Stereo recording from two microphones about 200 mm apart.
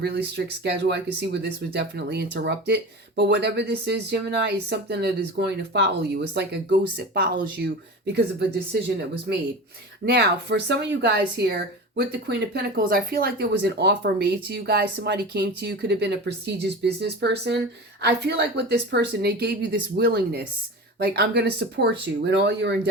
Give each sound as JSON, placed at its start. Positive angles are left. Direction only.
{"t": 0.0, "sound": "speech", "side_deg": -55}
{"t": 10.1, "sound": "speech", "side_deg": -55}